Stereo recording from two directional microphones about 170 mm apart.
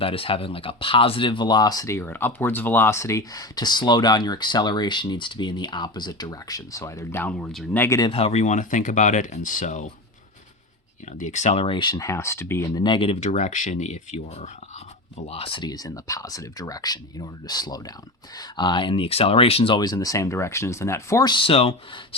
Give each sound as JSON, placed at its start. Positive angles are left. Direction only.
{"t": 0.0, "sound": "speech", "side_deg": 35}
{"t": 8.1, "sound": "speech", "side_deg": 40}
{"t": 11.2, "sound": "speech", "side_deg": 45}
{"t": 12.8, "sound": "speech", "side_deg": 30}